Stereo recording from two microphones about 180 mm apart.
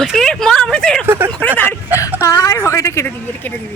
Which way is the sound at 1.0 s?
10° right (ahead or behind).